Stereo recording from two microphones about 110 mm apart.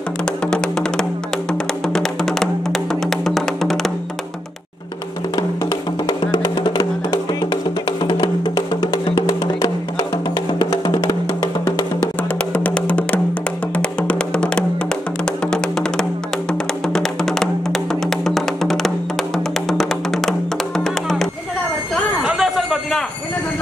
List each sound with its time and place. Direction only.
0.2 s music: 5° left (ahead or behind)
6.0 s music: 40° left (ahead or behind)
12.2 s music: 15° left (ahead or behind)
22.2 s a sound: 5° right (ahead or behind)